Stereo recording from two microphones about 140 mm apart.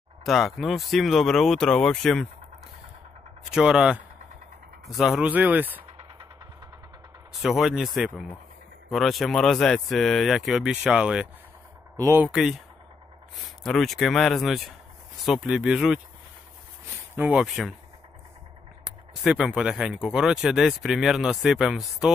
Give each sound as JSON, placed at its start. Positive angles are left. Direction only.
{"t": 0.2, "sound": "speech", "side_deg": 0}
{"t": 3.5, "sound": "speech", "side_deg": -5}
{"t": 7.3, "sound": "speech", "side_deg": 0}
{"t": 13.7, "sound": "speech", "side_deg": 0}
{"t": 17.1, "sound": "speech", "side_deg": -10}
{"t": 18.9, "sound": "speech", "side_deg": -5}